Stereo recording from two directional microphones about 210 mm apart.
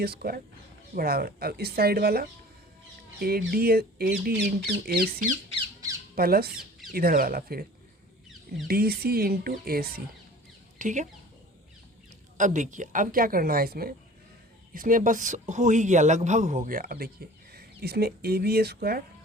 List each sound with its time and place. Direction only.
0.0 s speech: 45° right (ahead or behind)
8.6 s speech: 45° right (ahead or behind)
12.4 s speech: 35° right (ahead or behind)